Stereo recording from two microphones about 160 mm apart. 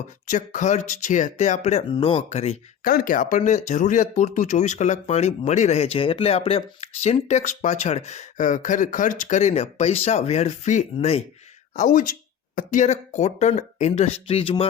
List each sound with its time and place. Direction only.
0.3 s speech: 55° left (ahead or behind)
2.8 s speech: 65° left (ahead or behind); by 11.2 s 40° left (ahead or behind)
11.8 s speech: 55° left (ahead or behind); by 14.7 s 35° left (ahead or behind)